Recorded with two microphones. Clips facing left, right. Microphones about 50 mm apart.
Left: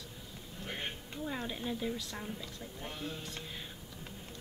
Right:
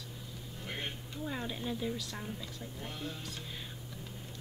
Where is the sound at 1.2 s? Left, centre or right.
Centre.